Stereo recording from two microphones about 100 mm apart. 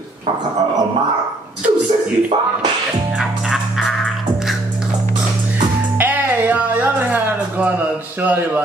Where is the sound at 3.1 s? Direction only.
5° right (ahead or behind).